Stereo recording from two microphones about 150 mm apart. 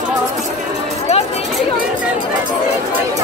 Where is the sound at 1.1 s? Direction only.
45° left (ahead or behind).